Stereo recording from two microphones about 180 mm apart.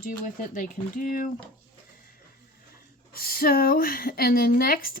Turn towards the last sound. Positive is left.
turn(degrees=55)  # may be behind; listen again after turning